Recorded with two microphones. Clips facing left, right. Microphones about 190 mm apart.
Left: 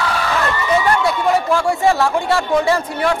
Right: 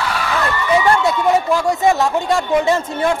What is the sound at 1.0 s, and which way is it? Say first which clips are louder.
A man's voice: right 1 dB; 20° right (ahead or behind).